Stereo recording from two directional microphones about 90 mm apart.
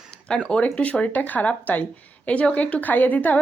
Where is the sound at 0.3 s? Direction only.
10° left (ahead or behind).